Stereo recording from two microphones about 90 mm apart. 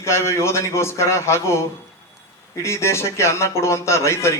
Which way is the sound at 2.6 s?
30° left (ahead or behind).